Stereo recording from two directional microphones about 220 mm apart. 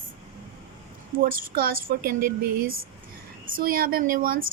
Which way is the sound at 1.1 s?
40° right (ahead or behind).